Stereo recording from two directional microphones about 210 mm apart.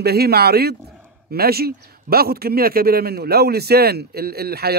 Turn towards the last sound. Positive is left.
turn(degrees=-50)  # may be behind; listen again after turning